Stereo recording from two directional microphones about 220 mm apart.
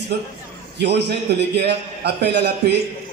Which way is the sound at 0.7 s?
50° right (ahead or behind).